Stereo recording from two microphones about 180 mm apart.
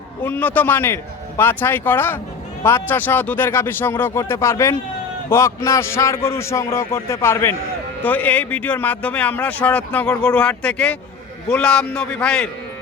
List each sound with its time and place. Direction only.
0.2 s a man's voice: 10° left (ahead or behind)